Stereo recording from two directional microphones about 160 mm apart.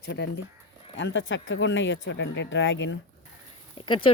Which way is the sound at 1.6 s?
90° left.